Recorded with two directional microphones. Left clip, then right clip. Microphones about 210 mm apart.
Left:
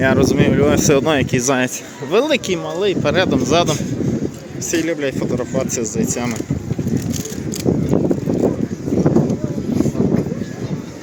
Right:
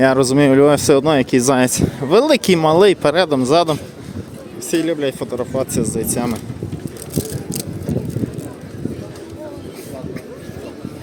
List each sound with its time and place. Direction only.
0.0 s speech: 25° right (ahead or behind)
2.5 s speech: 40° right (ahead or behind)
3.2 s speech: 25° right (ahead or behind)
4.7 s speech: 10° right (ahead or behind)